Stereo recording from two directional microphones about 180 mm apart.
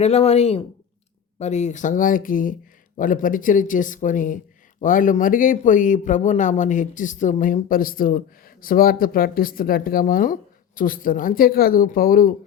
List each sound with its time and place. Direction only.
0.0 s speech: 35° left (ahead or behind); by 12.3 s 50° left (ahead or behind)